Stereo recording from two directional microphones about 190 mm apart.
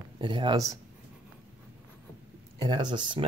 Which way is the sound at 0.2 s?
25° right (ahead or behind).